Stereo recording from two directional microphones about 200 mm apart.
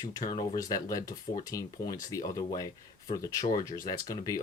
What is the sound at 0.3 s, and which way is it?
Speech, 15° left (ahead or behind).